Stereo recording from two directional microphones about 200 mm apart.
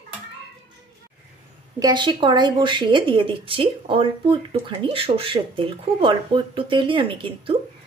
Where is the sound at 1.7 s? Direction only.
20° right (ahead or behind).